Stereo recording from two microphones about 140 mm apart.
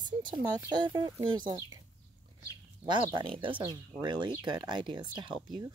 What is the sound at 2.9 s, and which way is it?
Speech, 35° right (ahead or behind).